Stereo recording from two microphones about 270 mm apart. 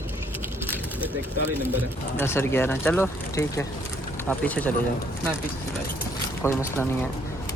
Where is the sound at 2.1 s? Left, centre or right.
Centre.